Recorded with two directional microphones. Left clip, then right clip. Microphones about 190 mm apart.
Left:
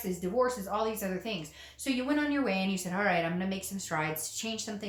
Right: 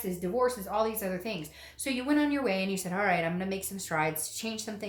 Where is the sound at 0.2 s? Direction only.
35° right (ahead or behind).